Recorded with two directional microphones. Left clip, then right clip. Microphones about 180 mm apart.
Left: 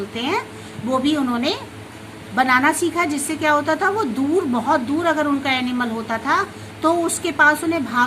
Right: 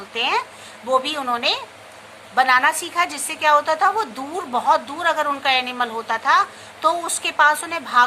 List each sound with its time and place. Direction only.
0.1 s a woman's voice: 15° right (ahead or behind)